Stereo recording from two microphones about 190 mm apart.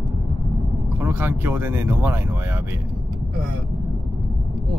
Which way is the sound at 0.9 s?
10° right (ahead or behind).